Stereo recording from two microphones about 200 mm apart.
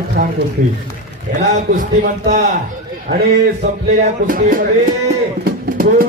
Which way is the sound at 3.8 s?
45° right (ahead or behind).